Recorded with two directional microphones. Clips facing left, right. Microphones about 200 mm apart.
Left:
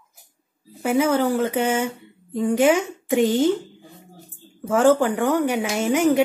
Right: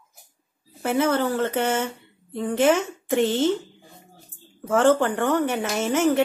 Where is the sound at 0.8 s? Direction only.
10° left (ahead or behind).